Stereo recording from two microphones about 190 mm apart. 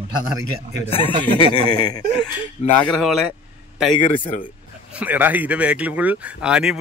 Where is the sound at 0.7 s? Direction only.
30° left (ahead or behind).